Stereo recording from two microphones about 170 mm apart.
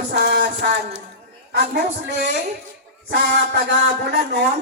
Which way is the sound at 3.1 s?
90° right.